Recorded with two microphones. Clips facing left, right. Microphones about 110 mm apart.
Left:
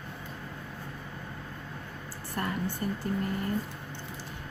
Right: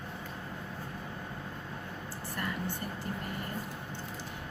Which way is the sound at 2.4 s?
40° left (ahead or behind).